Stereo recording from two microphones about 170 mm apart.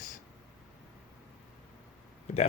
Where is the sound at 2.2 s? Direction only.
40° left (ahead or behind).